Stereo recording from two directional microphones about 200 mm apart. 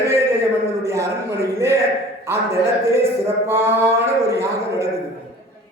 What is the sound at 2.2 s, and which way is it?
A man's voice, 15° right (ahead or behind).